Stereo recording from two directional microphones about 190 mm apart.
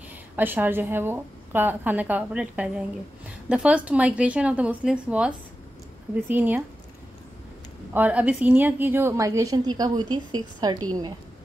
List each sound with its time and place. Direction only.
0.4 s a woman's voice: 10° right (ahead or behind)
7.9 s a woman's voice: 10° right (ahead or behind)